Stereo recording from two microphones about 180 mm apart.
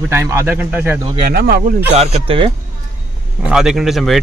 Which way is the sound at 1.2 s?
60° right (ahead or behind).